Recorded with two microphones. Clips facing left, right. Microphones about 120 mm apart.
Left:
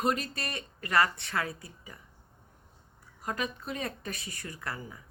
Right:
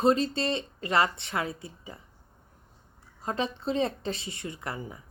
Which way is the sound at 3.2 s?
25° right (ahead or behind).